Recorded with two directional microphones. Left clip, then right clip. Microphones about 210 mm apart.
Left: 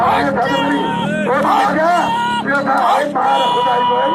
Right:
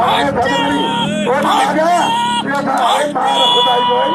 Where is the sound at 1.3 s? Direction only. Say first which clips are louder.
Even; 5° right (ahead or behind).